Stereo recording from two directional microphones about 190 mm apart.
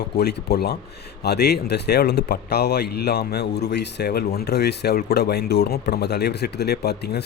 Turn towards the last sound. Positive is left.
turn(degrees=60)  # may be behind; listen again after turning